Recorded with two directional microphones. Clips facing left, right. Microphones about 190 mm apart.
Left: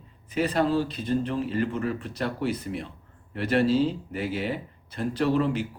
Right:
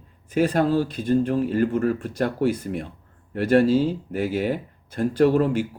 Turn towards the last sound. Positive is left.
turn(degrees=-45)  # may be behind; listen again after turning